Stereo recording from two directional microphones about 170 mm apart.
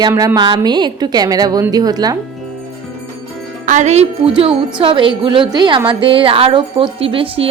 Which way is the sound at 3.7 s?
45° right (ahead or behind).